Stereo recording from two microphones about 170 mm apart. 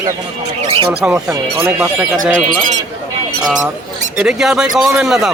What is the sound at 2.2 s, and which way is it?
Speech, 5° left (ahead or behind).